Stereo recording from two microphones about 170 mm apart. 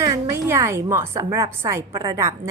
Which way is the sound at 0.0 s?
20° right (ahead or behind).